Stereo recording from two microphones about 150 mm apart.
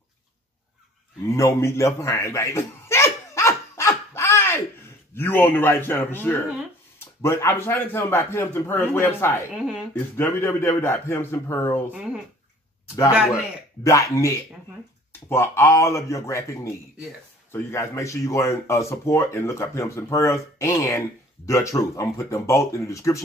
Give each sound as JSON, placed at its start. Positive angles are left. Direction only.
{"t": 1.2, "sound": "a sound", "side_deg": 20}
{"t": 5.1, "sound": "a man's voice", "side_deg": 15}
{"t": 9.5, "sound": "speech", "side_deg": -5}
{"t": 9.9, "sound": "a man's voice", "side_deg": 15}
{"t": 11.9, "sound": "speech", "side_deg": -5}
{"t": 13.8, "sound": "speech", "side_deg": 20}